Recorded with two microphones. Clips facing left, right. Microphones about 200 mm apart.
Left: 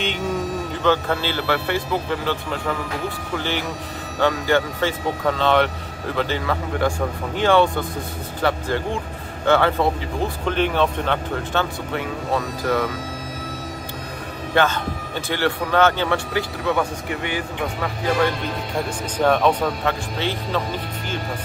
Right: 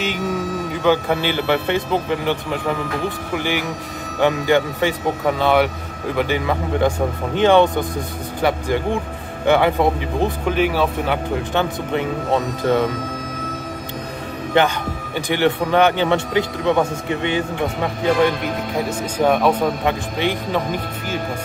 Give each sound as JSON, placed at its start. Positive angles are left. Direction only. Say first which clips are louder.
{"t": 0.8, "sound": "speech", "louder": "right 3 dB", "side_deg": -15}
{"t": 14.5, "sound": "speech", "louder": "right 2 dB", "side_deg": -15}
{"t": 18.9, "sound": "speech", "louder": "right 1 dB", "side_deg": -10}